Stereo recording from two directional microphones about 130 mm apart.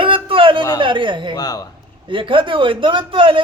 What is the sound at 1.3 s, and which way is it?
Mantra, 30° left (ahead or behind).